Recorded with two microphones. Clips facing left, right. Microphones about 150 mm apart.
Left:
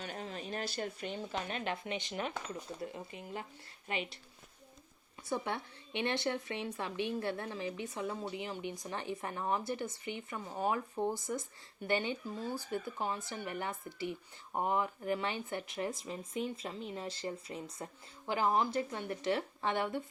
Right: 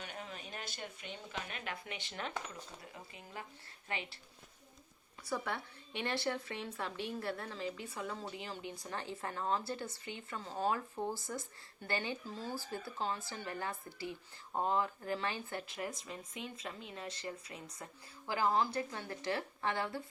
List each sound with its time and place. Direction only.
0.0 s speech: 35° left (ahead or behind); by 4.2 s 20° left (ahead or behind)
5.2 s speech: 20° left (ahead or behind)